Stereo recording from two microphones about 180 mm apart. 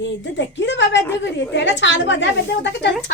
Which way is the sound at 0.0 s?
85° left.